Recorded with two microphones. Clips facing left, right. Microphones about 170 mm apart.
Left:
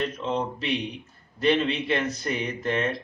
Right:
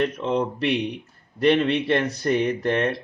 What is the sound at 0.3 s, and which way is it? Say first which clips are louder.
A man's voice: right 5 dB; 60° right (ahead or behind).